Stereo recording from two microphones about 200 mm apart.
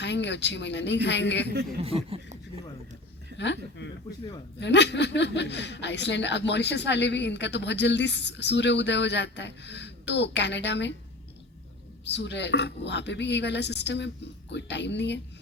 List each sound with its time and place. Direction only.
0.0 s speech: 60° left (ahead or behind)
1.8 s speech: 30° right (ahead or behind)
3.3 s speech: 60° left (ahead or behind)
12.0 s speech: 60° left (ahead or behind)